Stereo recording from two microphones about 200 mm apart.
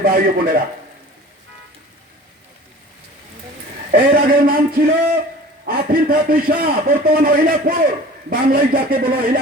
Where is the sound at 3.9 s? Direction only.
45° right (ahead or behind).